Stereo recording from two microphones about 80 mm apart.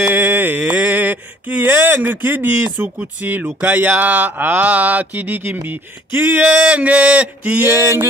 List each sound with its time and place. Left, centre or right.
0.0 s mantra: right
1.7 s speech: right
7.8 s music: right